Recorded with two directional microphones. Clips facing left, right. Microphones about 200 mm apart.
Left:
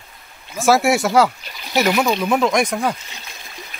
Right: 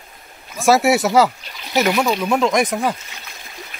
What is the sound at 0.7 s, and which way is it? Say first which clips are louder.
Speech: right 1 dB; centre (ahead or behind).